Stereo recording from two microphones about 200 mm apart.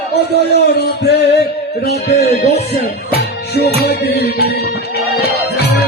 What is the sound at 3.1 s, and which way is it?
Music, 50° left (ahead or behind).